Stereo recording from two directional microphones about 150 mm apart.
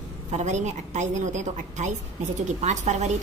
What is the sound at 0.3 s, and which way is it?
A woman's voice, 50° right (ahead or behind).